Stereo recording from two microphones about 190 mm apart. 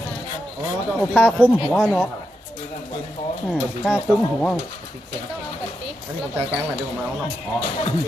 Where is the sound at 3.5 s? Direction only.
5° left (ahead or behind).